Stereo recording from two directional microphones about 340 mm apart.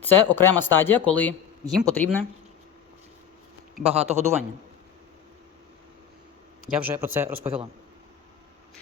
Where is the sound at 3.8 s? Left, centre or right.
Centre.